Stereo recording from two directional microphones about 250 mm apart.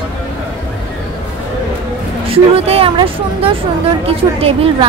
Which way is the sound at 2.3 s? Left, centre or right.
Right.